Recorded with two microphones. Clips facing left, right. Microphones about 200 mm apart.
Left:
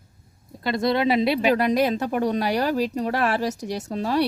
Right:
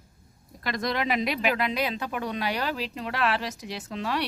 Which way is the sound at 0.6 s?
30° left (ahead or behind).